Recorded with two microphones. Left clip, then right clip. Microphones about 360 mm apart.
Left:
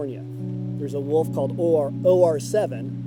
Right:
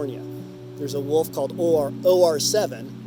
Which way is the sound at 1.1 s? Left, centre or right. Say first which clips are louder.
Even; left.